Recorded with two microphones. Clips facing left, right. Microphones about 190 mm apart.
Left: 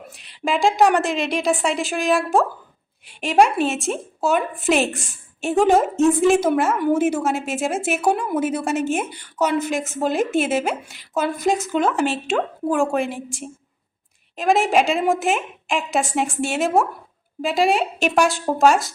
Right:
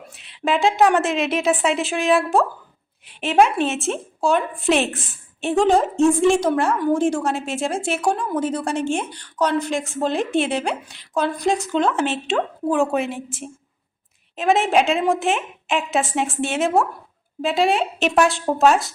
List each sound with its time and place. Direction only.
0.2 s a woman's voice: centre (ahead or behind)
14.3 s a woman's voice: centre (ahead or behind)